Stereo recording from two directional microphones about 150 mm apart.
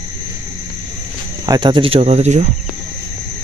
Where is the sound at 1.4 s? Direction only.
30° right (ahead or behind); by 2.4 s 45° right (ahead or behind).